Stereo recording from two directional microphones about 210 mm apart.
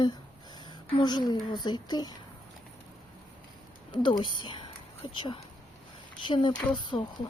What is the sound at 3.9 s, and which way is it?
A woman's voice, 20° left (ahead or behind).